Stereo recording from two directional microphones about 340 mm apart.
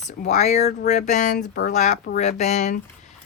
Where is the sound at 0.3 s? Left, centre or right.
Centre.